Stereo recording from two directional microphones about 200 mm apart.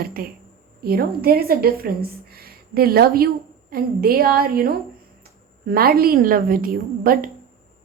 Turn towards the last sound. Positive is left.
turn(degrees=-45)  # may be behind; listen again after turning